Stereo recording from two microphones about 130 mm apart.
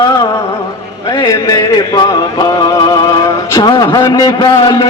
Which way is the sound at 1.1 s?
25° left (ahead or behind).